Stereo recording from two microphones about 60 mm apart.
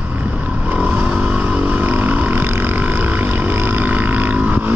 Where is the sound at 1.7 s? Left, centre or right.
Right.